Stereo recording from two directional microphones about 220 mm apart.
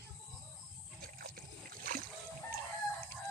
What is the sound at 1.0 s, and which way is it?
Water, 45° right (ahead or behind).